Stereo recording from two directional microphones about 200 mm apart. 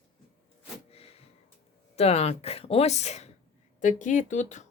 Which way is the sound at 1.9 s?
30° left (ahead or behind).